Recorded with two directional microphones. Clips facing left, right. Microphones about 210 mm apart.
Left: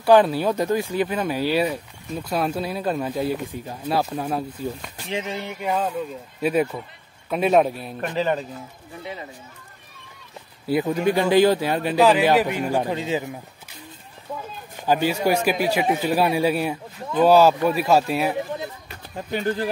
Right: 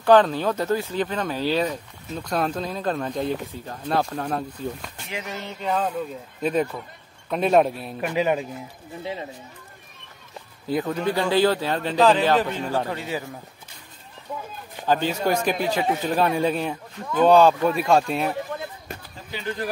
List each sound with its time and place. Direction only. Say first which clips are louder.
0.0 s speech: left 1 dB; 10° left (ahead or behind)
4.9 s speech: left 5 dB; 30° left (ahead or behind); by 8.1 s centre (ahead or behind)
8.1 s speech: right 1 dB; 10° right (ahead or behind)
10.7 s speech: left 3 dB; 10° left (ahead or behind)
14.9 s speech: left 2 dB; 10° left (ahead or behind)
19.1 s speech: left 8 dB; 50° left (ahead or behind)